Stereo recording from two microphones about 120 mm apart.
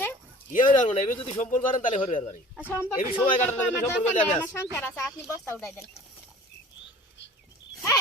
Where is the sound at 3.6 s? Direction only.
20° left (ahead or behind).